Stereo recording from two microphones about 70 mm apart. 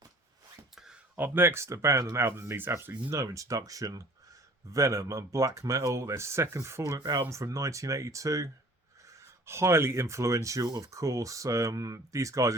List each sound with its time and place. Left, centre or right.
1.1 s speech: right
3.1 s speech: right